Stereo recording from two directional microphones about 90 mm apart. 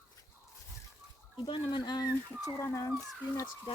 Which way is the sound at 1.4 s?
70° left (ahead or behind).